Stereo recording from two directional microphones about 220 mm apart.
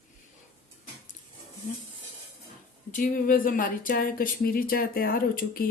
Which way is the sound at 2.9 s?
40° left (ahead or behind).